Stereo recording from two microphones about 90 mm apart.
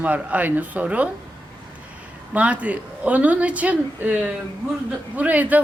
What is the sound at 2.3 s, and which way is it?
A woman's voice, 15° right (ahead or behind).